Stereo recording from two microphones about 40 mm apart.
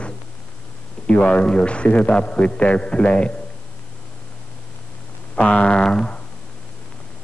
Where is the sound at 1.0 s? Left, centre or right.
Left.